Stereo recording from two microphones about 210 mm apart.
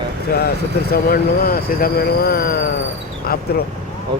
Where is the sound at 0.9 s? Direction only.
45° left (ahead or behind).